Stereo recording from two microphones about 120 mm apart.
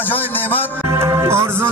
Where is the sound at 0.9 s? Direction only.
25° right (ahead or behind).